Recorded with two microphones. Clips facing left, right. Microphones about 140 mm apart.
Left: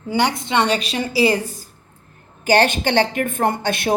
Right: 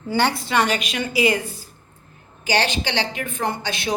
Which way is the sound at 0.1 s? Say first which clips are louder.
Left 1 dB; 15° left (ahead or behind).